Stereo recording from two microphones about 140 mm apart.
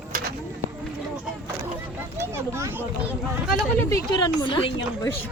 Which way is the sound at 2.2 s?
20° right (ahead or behind).